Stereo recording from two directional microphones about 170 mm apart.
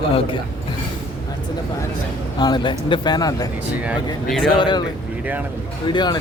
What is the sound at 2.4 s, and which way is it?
Speech, 25° left (ahead or behind).